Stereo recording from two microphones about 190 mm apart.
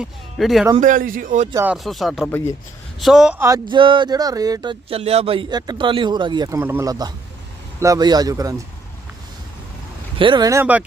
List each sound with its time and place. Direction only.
0.0 s speech: centre (ahead or behind)
0.8 s speech: 45° right (ahead or behind)
1.5 s speech: 5° right (ahead or behind)
3.4 s speech: 20° right (ahead or behind)
6.6 s speech: 10° right (ahead or behind)
10.2 s speech: 25° right (ahead or behind)